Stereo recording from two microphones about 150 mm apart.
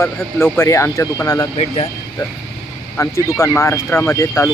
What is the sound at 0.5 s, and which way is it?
Speech, 15° left (ahead or behind).